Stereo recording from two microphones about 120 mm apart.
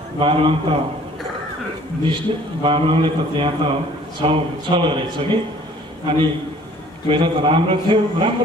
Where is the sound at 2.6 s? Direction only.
45° right (ahead or behind).